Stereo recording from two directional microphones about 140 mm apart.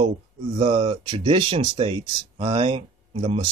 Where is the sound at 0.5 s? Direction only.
45° right (ahead or behind).